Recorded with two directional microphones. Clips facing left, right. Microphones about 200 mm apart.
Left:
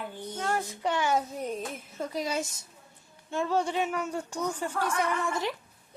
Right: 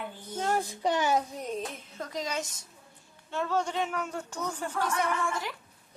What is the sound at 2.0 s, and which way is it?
Speech, 10° left (ahead or behind).